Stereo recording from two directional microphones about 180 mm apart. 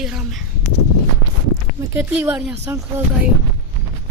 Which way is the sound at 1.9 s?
10° right (ahead or behind).